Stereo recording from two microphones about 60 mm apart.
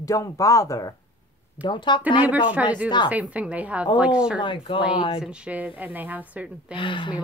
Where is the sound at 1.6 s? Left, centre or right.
Right.